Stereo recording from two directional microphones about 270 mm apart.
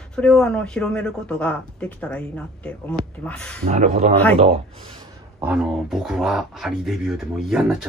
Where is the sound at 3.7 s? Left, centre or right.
Right.